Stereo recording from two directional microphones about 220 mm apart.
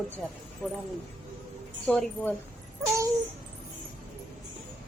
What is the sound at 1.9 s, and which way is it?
Speech, 5° left (ahead or behind).